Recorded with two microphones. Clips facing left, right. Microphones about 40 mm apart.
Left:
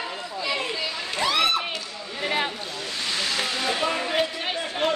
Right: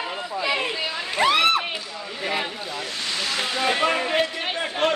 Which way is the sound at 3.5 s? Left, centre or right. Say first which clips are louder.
Right 7 dB; right.